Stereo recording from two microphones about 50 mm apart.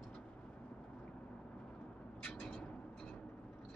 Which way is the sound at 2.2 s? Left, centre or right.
Left.